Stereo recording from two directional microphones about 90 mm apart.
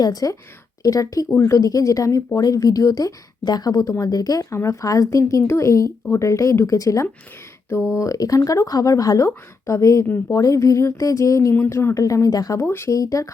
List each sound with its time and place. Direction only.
0.0 s speech: 40° left (ahead or behind)
11.5 s speech: 25° left (ahead or behind); by 12.6 s 40° left (ahead or behind)
12.6 s speech: 25° left (ahead or behind)
12.9 s speech: 40° left (ahead or behind)